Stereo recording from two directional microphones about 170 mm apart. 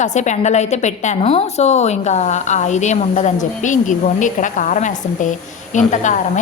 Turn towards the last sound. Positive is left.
turn(degrees=45)  # may be behind; listen again after turning